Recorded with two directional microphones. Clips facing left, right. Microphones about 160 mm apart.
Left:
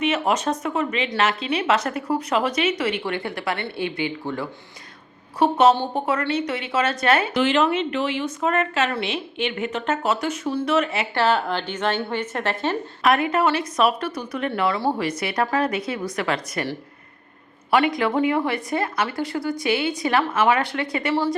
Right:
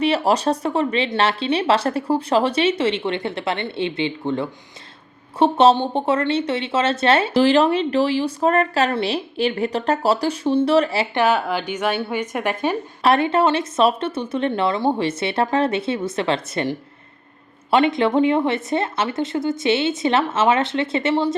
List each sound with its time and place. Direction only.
0.0 s a woman's voice: 35° right (ahead or behind)
11.1 s a woman's voice: 15° right (ahead or behind)
13.0 s speech: 30° right (ahead or behind)